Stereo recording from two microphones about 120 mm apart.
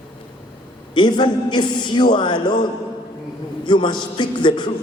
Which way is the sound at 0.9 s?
40° left (ahead or behind).